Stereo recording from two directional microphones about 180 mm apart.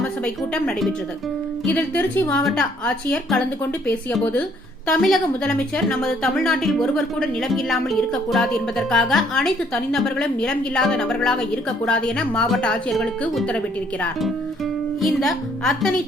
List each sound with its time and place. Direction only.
0.5 s a woman's voice: 5° left (ahead or behind)
15.0 s a woman's voice: centre (ahead or behind)